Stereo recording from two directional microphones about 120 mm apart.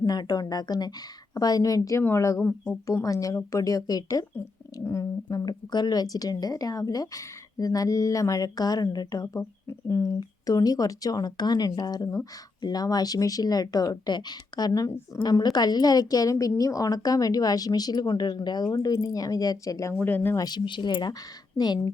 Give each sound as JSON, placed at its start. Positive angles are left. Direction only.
{"t": 0.0, "sound": "a woman's voice", "side_deg": 35}
{"t": 19.9, "sound": "speech", "side_deg": 15}
{"t": 20.3, "sound": "a woman's voice", "side_deg": 35}